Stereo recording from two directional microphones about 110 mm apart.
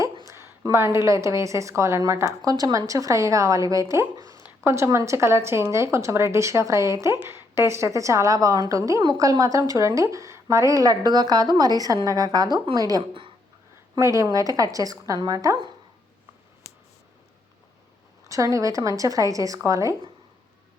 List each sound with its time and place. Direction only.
0.3 s a woman's voice: 25° right (ahead or behind)
18.3 s a woman's voice: 30° right (ahead or behind)